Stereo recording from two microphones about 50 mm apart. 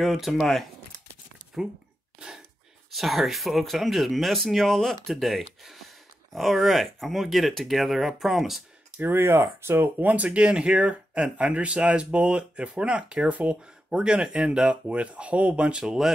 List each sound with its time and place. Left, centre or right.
0.0 s speech: centre
1.6 s speech: centre
2.1 s a sound: centre
2.9 s speech: centre
8.9 s speech: right
9.9 s speech: right
13.8 s speech: centre
15.8 s speech: centre